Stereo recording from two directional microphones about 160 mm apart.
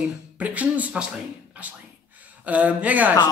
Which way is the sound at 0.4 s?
10° right (ahead or behind).